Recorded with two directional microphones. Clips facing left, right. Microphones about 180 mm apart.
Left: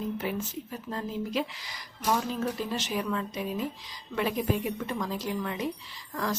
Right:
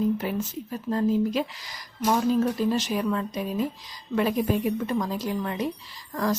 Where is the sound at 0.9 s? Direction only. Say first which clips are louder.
Right 11 dB; 40° right (ahead or behind).